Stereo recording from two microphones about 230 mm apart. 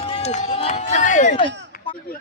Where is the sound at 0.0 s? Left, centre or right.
Left.